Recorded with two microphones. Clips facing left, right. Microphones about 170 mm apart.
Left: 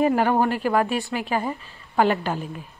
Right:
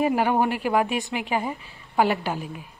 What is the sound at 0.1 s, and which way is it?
Speech, 15° right (ahead or behind).